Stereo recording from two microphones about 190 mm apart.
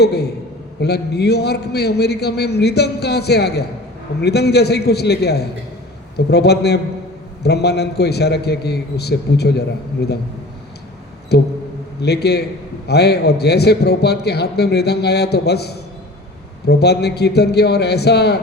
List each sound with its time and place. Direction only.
0.0 s a man's voice: 60° left (ahead or behind)
11.3 s a man's voice: 60° left (ahead or behind)